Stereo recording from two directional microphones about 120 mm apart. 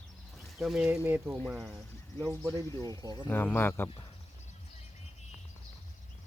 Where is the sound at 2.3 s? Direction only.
25° right (ahead or behind).